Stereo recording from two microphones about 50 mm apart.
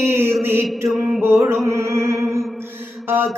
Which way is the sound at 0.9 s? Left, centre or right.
Centre.